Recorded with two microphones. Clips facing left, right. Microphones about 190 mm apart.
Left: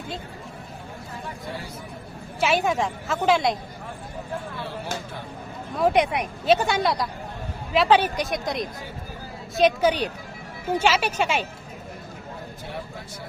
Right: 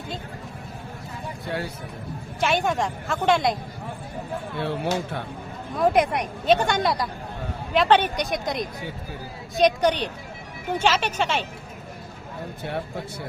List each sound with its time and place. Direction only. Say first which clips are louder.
1.5 s speech: right 8 dB; 65° right (ahead or behind)
2.4 s a woman's voice: left 1 dB; 5° left (ahead or behind)
4.5 s speech: right 6 dB; 60° right (ahead or behind)
5.7 s a woman's voice: even; centre (ahead or behind)